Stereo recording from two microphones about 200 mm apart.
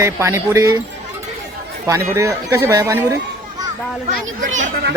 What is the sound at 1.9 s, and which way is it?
Speech, 15° right (ahead or behind).